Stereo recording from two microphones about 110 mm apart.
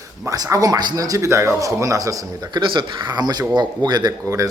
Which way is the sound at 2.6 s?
45° right (ahead or behind).